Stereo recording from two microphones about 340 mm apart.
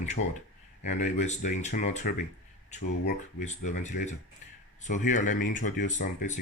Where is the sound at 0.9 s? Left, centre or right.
Left.